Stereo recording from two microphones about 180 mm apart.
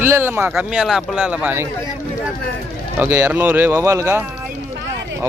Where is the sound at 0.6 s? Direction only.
Centre (ahead or behind).